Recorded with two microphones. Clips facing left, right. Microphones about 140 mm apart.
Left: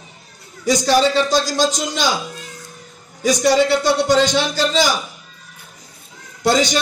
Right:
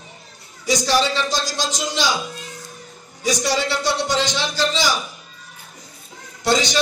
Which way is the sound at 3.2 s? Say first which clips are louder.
Left 7 dB; 50° left (ahead or behind).